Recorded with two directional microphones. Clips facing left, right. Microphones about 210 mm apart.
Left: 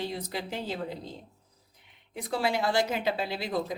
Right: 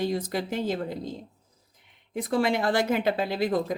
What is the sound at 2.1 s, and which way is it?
Speech, 50° right (ahead or behind).